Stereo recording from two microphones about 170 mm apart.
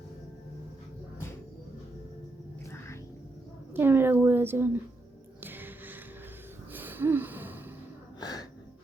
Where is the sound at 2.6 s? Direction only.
15° left (ahead or behind).